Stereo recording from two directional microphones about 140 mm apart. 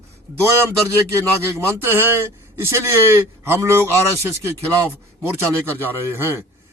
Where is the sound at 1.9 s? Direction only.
15° right (ahead or behind).